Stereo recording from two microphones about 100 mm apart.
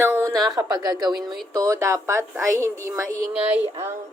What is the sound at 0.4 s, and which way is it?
A woman's voice, 40° right (ahead or behind).